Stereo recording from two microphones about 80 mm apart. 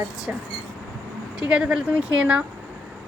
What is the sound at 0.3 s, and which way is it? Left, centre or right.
A woman's voice, centre.